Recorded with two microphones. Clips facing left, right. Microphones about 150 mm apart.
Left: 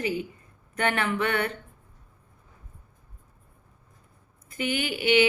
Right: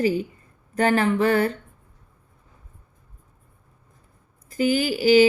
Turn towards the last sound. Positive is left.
turn(degrees=-35)  # may be behind; listen again after turning